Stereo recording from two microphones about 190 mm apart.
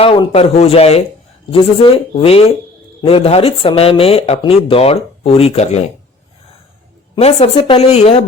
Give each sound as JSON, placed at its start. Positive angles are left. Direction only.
{"t": 0.0, "sound": "speech", "side_deg": 30}
{"t": 7.2, "sound": "speech", "side_deg": 35}